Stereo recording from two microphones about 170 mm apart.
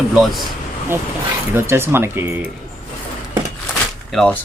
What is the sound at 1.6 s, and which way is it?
Speech, 15° right (ahead or behind).